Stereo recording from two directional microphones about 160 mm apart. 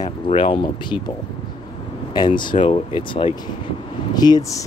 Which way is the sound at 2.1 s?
30° left (ahead or behind).